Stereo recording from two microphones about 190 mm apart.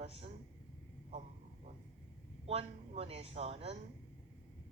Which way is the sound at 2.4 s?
30° right (ahead or behind).